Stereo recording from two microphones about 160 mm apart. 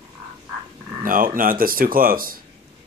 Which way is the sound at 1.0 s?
60° right (ahead or behind).